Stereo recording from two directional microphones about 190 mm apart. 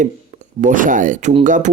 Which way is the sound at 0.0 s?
40° right (ahead or behind).